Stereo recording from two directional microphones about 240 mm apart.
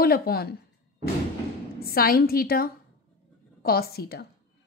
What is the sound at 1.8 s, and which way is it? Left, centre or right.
A woman's voice, left.